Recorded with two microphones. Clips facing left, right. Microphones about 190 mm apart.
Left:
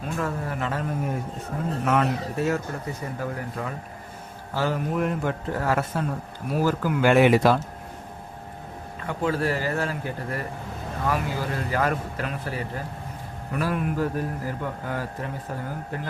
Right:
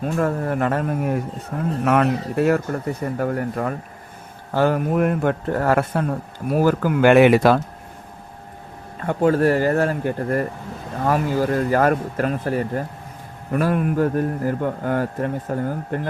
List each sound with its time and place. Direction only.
0.0 s a man's voice: 50° right (ahead or behind); by 7.6 s 65° right (ahead or behind)
9.0 s a man's voice: 45° right (ahead or behind)